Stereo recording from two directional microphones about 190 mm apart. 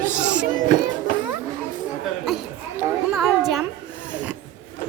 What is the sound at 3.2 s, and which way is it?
Speech, centre (ahead or behind).